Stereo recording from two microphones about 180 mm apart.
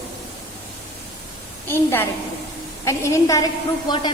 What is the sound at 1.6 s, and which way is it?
A woman's voice, 15° left (ahead or behind).